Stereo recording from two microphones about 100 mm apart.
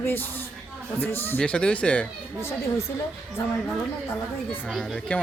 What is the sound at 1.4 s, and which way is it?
Speech, 10° left (ahead or behind).